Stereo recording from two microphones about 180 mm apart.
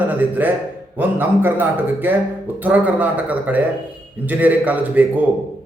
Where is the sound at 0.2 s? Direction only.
10° right (ahead or behind).